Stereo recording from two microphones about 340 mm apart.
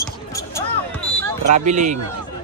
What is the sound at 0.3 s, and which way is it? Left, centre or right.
Basketball bounce, centre.